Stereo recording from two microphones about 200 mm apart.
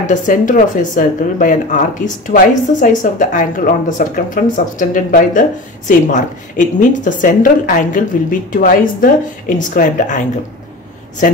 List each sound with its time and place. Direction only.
0.0 s speech: 40° left (ahead or behind)